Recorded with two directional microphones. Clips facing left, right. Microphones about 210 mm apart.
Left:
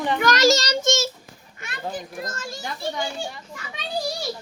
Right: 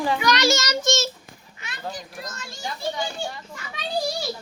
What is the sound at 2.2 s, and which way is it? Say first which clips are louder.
Speech: left 4 dB; 50° left (ahead or behind).